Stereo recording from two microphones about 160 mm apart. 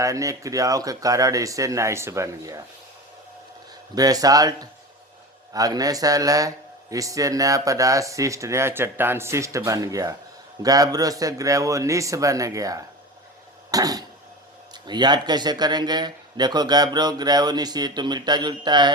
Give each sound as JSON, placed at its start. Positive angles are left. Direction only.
{"t": 0.0, "sound": "speech", "side_deg": -20}
{"t": 3.9, "sound": "speech", "side_deg": -25}
{"t": 13.7, "sound": "cough", "side_deg": -25}
{"t": 14.7, "sound": "speech", "side_deg": -25}